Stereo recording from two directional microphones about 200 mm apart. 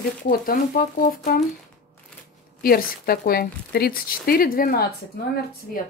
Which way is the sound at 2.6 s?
50° left (ahead or behind).